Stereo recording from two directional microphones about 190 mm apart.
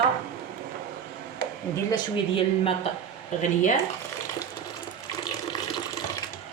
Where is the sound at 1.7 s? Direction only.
25° left (ahead or behind).